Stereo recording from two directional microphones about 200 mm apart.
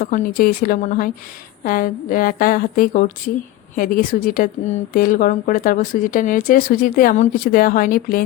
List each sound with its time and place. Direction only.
0.0 s speech: 40° left (ahead or behind)